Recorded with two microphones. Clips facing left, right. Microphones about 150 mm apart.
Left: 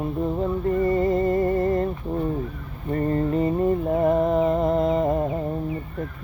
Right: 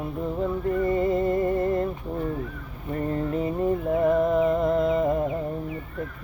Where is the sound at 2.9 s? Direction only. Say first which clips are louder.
Left 4 dB; 5° right (ahead or behind).